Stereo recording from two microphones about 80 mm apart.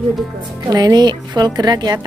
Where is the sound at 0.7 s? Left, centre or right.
Right.